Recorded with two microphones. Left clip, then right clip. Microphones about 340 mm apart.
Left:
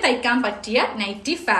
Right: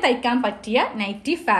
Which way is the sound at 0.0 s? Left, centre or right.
Centre.